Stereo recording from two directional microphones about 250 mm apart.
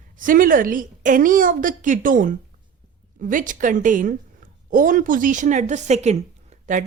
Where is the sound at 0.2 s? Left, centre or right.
Right.